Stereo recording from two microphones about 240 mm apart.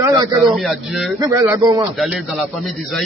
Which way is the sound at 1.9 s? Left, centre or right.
Centre.